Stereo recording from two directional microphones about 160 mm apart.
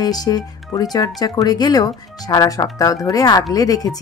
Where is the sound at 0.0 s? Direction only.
25° left (ahead or behind).